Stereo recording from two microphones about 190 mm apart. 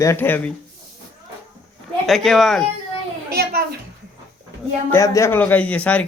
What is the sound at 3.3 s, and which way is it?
Speech, 50° right (ahead or behind).